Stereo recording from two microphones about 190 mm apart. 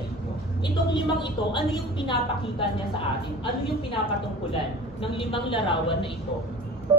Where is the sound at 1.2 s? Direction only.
25° left (ahead or behind).